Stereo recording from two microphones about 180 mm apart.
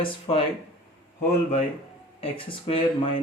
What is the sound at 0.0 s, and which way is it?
Speech, 30° left (ahead or behind).